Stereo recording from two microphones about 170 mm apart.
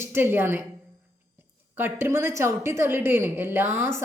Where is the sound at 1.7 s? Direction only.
15° right (ahead or behind).